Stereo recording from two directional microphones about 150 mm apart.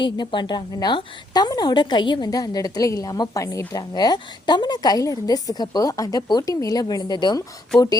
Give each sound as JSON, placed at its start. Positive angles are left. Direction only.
{"t": 0.0, "sound": "a woman's voice", "side_deg": 30}